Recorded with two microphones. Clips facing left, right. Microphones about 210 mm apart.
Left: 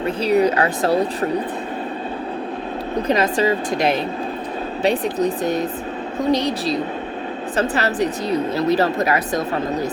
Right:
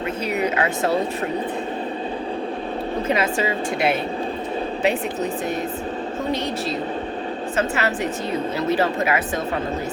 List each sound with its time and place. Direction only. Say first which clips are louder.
0.0 s a woman's voice: left 6 dB; 35° left (ahead or behind)
3.1 s a woman's voice: left 5 dB; 40° left (ahead or behind)